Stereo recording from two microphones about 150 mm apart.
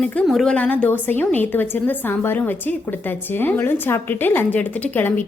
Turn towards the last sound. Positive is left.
turn(degrees=10)  # may be behind; listen again after turning